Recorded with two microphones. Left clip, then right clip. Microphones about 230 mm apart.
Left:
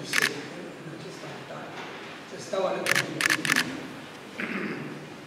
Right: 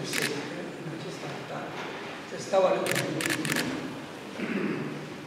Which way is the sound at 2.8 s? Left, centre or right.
Centre.